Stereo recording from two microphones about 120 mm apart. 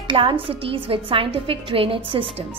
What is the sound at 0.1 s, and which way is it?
A woman's voice, 45° right (ahead or behind).